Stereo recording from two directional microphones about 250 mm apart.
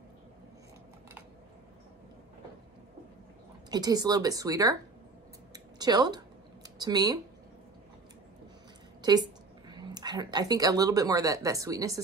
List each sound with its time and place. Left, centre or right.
3.7 s speech: centre
5.5 s a sound: centre
9.0 s speech: centre